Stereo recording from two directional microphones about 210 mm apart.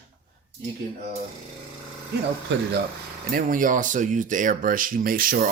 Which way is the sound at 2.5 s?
60° right (ahead or behind).